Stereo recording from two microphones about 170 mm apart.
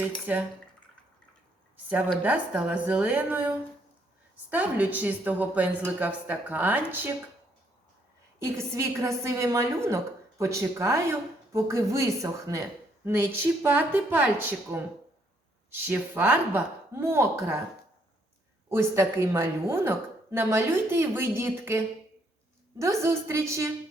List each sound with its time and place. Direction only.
0.3 s a woman's voice: 10° right (ahead or behind)
2.2 s a woman's voice: 10° right (ahead or behind)
8.4 s a woman's voice: 15° right (ahead or behind)
15.7 s a woman's voice: 10° right (ahead or behind)
18.7 s a woman's voice: 15° right (ahead or behind)